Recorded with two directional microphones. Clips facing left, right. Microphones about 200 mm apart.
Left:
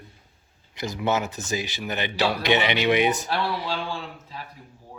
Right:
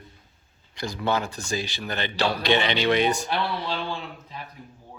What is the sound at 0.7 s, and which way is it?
A man's voice, 20° left (ahead or behind).